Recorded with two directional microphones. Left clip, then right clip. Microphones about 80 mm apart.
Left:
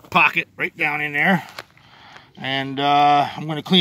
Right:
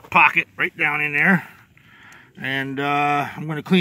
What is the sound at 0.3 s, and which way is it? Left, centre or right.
Speech, right.